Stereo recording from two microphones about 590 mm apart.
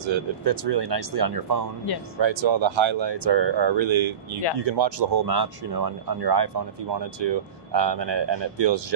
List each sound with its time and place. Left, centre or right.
0.0 s speech: right